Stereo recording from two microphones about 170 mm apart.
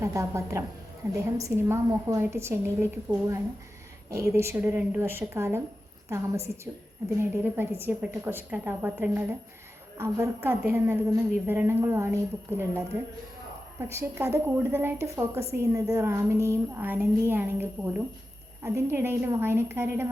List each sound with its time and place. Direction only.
0.0 s a woman's voice: 20° right (ahead or behind)